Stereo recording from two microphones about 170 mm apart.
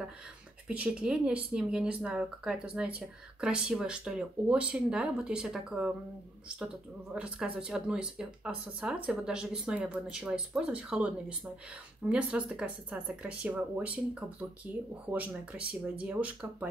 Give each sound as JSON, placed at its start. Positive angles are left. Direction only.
{"t": 0.7, "sound": "speech", "side_deg": -5}
{"t": 7.2, "sound": "speech", "side_deg": -5}
{"t": 15.0, "sound": "speech", "side_deg": -10}